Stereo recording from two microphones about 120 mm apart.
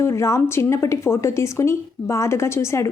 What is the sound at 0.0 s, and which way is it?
A woman's voice, 25° left (ahead or behind).